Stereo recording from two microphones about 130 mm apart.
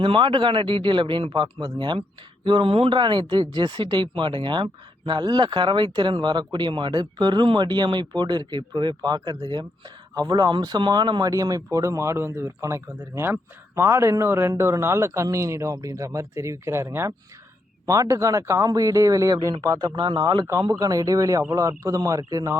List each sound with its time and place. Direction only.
0.0 s speech: 40° right (ahead or behind)